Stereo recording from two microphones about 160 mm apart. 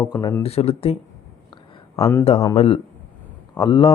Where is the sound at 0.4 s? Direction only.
40° left (ahead or behind).